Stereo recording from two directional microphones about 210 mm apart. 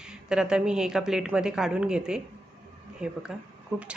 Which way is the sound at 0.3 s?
5° right (ahead or behind).